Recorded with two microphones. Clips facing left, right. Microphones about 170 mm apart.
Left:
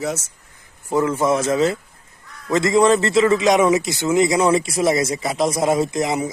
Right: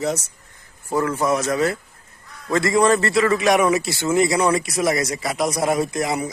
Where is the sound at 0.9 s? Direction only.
20° left (ahead or behind).